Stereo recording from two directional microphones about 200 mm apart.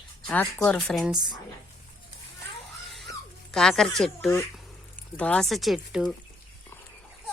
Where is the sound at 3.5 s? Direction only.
5° left (ahead or behind).